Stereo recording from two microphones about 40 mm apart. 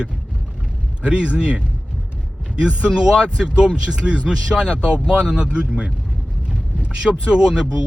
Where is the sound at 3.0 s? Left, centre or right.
Centre.